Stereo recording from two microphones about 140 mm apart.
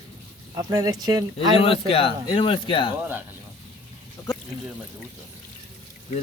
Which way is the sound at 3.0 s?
15° right (ahead or behind).